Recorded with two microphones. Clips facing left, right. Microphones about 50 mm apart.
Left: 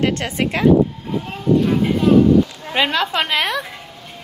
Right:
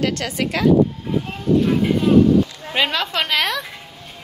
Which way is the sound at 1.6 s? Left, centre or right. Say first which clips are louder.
Left 1 dB; centre.